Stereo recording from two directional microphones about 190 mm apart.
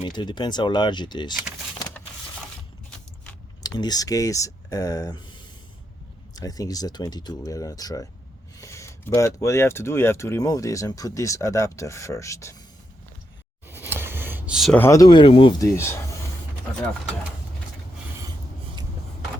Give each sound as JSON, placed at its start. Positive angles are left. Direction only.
{"t": 0.0, "sound": "speech", "side_deg": 25}
{"t": 3.6, "sound": "speech", "side_deg": 20}
{"t": 13.7, "sound": "a sound", "side_deg": -10}
{"t": 14.8, "sound": "speech", "side_deg": 15}
{"t": 15.7, "sound": "speech", "side_deg": 15}